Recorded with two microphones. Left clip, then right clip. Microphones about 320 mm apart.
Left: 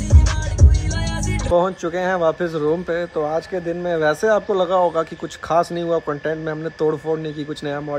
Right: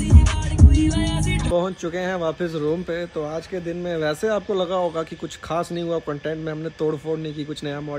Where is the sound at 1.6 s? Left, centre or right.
Centre.